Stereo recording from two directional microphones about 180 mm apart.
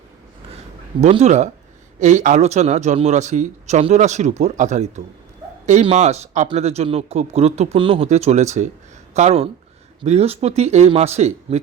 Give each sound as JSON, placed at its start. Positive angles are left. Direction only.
{"t": 1.0, "sound": "speech", "side_deg": -40}